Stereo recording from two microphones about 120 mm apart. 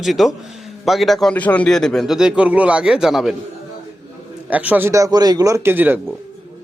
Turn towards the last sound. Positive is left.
turn(degrees=-15)  # may be behind; listen again after turning